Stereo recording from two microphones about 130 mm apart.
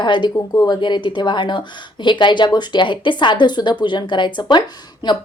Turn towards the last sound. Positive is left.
turn(degrees=35)  # may be behind; listen again after turning